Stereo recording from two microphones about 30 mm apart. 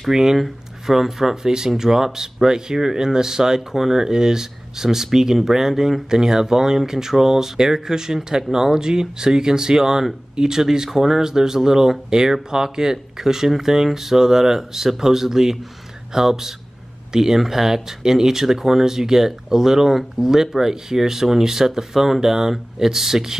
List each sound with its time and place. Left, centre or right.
0.1 s speech: centre
1.3 s speech: right